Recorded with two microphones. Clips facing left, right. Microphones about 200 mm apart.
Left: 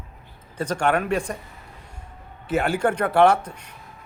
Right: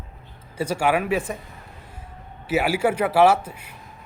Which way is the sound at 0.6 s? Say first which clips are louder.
Right 1 dB; 10° right (ahead or behind).